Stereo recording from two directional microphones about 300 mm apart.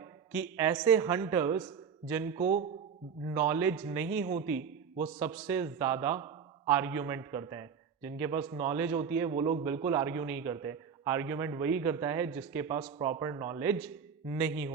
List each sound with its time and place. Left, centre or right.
0.3 s a man's voice: centre
2.4 s a man's voice: right
3.3 s a man's voice: centre